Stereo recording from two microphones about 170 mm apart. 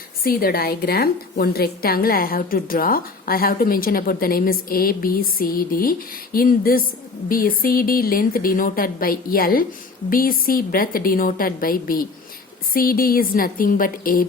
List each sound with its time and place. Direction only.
0.2 s a woman's voice: 60° left (ahead or behind)